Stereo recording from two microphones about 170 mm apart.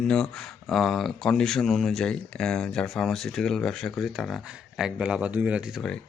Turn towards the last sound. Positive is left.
turn(degrees=5)  # may be behind; listen again after turning